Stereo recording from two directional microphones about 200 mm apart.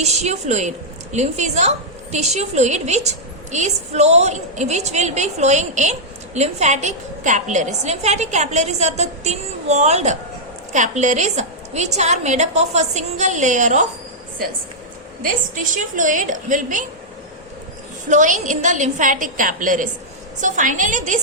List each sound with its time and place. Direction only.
0.0 s a woman's voice: 35° right (ahead or behind)
15.2 s a woman's voice: 40° right (ahead or behind)
18.1 s a woman's voice: 40° right (ahead or behind)